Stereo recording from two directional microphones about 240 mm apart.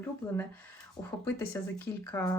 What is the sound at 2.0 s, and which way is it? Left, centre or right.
Speech, centre.